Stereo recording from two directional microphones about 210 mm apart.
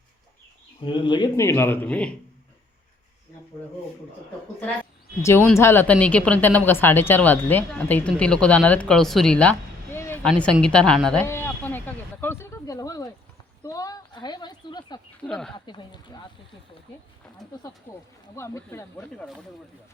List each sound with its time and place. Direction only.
0.8 s speech: 25° left (ahead or behind); by 2.1 s 5° left (ahead or behind)
5.2 s a woman's voice: 10° left (ahead or behind)
13.7 s a sound: 15° left (ahead or behind)
15.2 s speech: 5° left (ahead or behind)
15.5 s speech: 20° left (ahead or behind)
17.9 s speech: 10° left (ahead or behind)